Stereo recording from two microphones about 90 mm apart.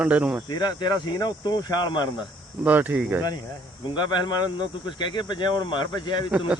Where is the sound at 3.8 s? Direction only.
55° left (ahead or behind).